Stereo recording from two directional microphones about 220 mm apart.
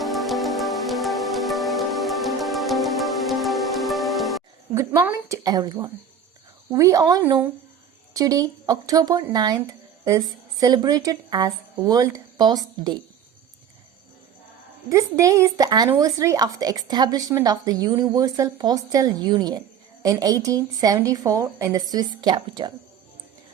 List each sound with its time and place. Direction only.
0.0 s music: centre (ahead or behind)
4.7 s speech: 10° right (ahead or behind)
14.8 s speech: 15° right (ahead or behind)